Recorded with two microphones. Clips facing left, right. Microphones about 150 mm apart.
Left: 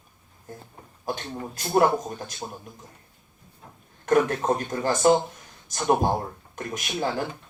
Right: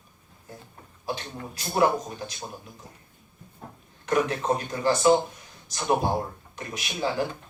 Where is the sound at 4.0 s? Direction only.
50° left (ahead or behind).